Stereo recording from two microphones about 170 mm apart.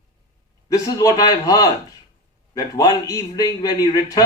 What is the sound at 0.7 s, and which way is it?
A man's voice, 20° left (ahead or behind).